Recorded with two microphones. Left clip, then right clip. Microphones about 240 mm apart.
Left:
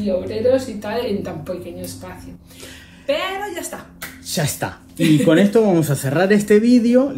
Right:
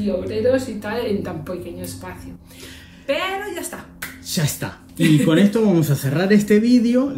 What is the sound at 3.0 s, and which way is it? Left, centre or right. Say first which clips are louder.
Speech: left 1 dB; centre.